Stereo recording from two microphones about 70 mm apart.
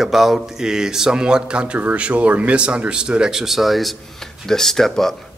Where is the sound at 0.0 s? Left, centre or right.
Centre.